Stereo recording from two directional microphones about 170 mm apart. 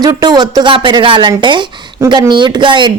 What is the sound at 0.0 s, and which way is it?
Speech, 25° right (ahead or behind).